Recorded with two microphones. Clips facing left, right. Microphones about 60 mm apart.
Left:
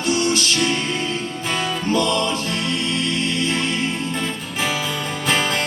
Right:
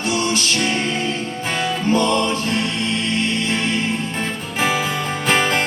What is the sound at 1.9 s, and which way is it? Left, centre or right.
Music, right.